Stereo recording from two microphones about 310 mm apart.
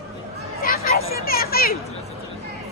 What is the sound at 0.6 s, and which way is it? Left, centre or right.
Chatter, left.